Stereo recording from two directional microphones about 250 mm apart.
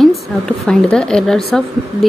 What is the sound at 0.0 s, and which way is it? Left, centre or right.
A woman's voice, centre.